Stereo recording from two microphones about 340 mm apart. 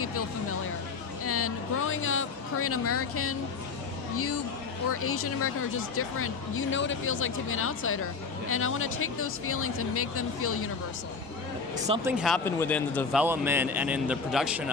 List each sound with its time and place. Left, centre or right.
1.2 s speech: left
12.0 s a man's voice: centre
13.2 s a man's voice: centre